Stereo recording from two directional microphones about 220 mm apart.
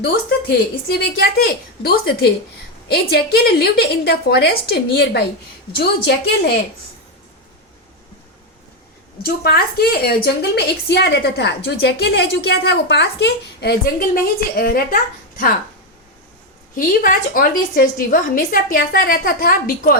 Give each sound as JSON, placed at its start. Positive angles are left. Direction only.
{"t": 0.0, "sound": "a woman's voice", "side_deg": 50}
{"t": 9.2, "sound": "a woman's voice", "side_deg": 45}
{"t": 16.7, "sound": "a woman's voice", "side_deg": 40}